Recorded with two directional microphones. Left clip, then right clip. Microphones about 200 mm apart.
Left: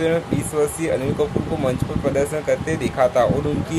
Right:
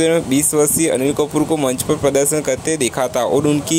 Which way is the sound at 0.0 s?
40° right (ahead or behind).